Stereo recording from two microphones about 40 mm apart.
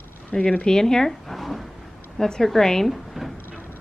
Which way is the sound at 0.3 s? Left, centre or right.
Left.